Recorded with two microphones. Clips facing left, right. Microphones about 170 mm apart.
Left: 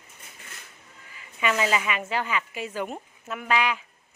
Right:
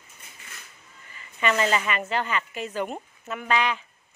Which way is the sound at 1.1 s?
5° left (ahead or behind).